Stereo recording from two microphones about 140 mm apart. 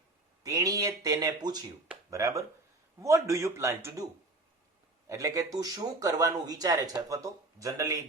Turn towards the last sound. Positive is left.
turn(degrees=-25)  # may be behind; listen again after turning